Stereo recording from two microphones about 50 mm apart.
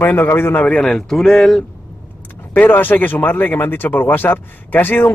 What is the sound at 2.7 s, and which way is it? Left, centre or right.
A man's voice, left.